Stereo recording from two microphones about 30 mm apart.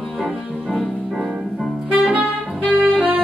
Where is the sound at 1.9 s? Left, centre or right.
Right.